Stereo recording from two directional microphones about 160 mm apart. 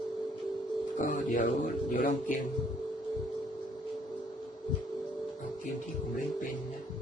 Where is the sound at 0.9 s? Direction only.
55° left (ahead or behind).